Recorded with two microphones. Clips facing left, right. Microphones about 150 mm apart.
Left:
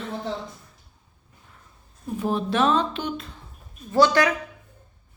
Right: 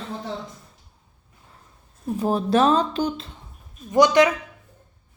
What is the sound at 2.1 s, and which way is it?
Speech, 35° right (ahead or behind).